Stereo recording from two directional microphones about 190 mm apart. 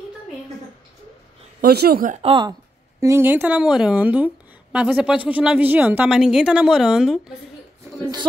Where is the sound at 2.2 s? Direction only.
25° right (ahead or behind).